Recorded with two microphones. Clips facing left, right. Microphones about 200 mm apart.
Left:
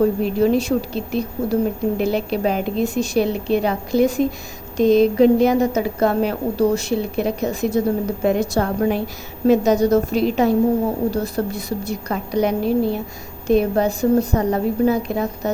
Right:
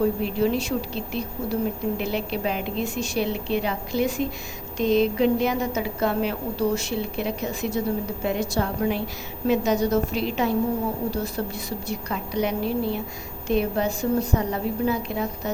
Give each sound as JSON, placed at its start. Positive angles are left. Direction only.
{"t": 0.0, "sound": "a woman's voice", "side_deg": 45}